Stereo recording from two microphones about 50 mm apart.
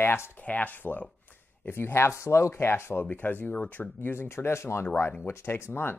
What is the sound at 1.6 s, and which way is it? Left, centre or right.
Speech, left.